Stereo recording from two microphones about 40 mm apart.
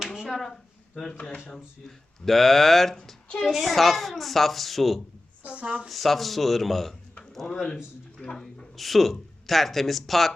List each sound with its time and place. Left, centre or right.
0.3 s a sound: centre
2.2 s speech: centre
5.5 s a woman's voice: right
5.9 s speech: centre
8.2 s speech: centre
8.7 s speech: centre